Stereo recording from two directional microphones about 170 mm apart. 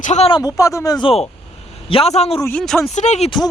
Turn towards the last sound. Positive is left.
turn(degrees=25)  # may be behind; listen again after turning